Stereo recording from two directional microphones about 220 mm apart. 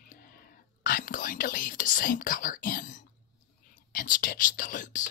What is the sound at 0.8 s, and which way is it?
Speech, 40° left (ahead or behind).